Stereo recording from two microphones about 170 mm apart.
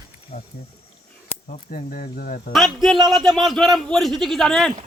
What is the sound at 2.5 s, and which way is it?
Speech, centre (ahead or behind).